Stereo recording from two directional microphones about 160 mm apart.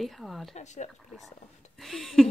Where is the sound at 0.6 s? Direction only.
45° left (ahead or behind).